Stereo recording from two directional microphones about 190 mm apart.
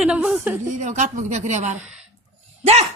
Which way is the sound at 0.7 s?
40° right (ahead or behind).